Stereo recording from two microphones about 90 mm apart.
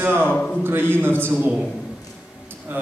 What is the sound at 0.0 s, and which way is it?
A man's voice, 25° right (ahead or behind).